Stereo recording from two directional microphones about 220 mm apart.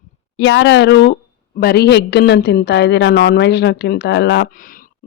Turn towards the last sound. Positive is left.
turn(degrees=40)  # may be behind; listen again after turning